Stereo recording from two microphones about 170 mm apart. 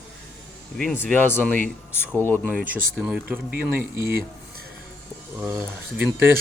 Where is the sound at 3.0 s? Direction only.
5° right (ahead or behind).